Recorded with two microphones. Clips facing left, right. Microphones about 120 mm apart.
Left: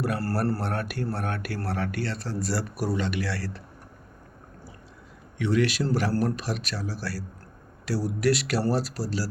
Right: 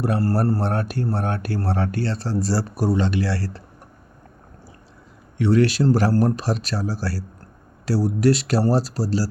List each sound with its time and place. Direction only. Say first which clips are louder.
0.5 s speech: right 6 dB; 30° right (ahead or behind)
5.4 s speech: right 6 dB; 35° right (ahead or behind)